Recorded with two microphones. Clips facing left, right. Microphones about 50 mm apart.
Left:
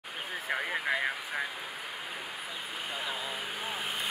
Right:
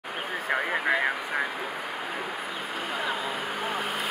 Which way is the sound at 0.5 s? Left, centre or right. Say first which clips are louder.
Right 6 dB; right.